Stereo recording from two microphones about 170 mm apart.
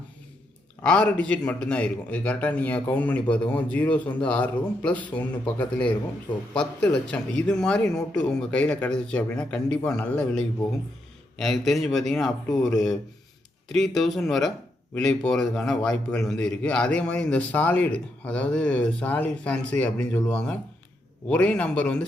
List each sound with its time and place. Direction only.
0.8 s a man's voice: 5° left (ahead or behind)